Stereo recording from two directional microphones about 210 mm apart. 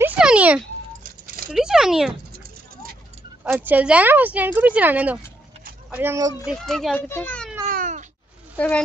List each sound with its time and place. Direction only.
0.0 s a sound: 5° right (ahead or behind)
1.2 s a sound: 45° right (ahead or behind)
1.5 s speech: centre (ahead or behind)
3.5 s speech: 10° right (ahead or behind)
6.4 s a child's voice: centre (ahead or behind)
7.7 s cat: 35° right (ahead or behind)
8.5 s a child's voice: 5° left (ahead or behind)